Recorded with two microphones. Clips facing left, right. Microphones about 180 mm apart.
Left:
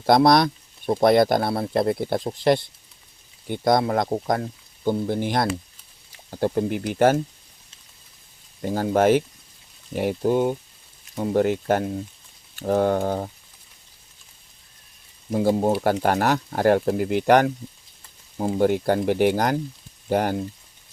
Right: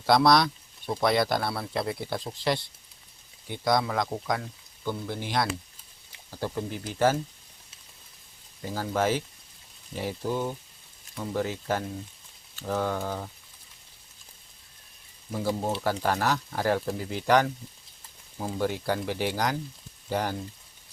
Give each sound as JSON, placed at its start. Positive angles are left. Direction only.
{"t": 0.0, "sound": "speech", "side_deg": 50}
{"t": 8.6, "sound": "speech", "side_deg": 55}
{"t": 15.3, "sound": "speech", "side_deg": 55}